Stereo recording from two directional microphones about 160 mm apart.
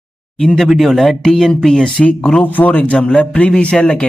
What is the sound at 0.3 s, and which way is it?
Speech, 5° left (ahead or behind).